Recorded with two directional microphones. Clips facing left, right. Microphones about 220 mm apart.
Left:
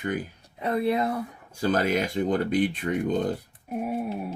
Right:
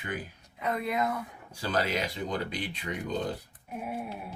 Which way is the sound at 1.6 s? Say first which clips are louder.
Left 6 dB; 45° left (ahead or behind).